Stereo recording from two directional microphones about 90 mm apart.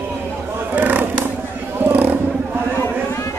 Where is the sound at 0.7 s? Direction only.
20° right (ahead or behind).